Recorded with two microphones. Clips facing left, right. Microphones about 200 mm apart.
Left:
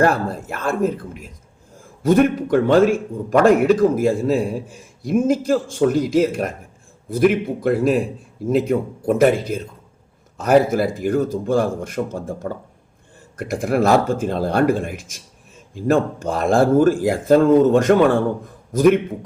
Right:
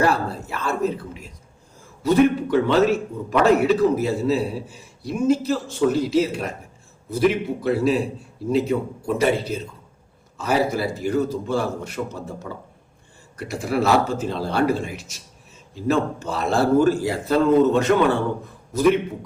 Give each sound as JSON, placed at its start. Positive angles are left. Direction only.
{"t": 0.0, "sound": "a man's voice", "side_deg": 50}
{"t": 16.2, "sound": "a man's voice", "side_deg": 50}